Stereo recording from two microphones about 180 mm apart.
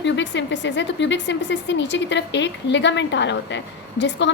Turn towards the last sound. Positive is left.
turn(degrees=85)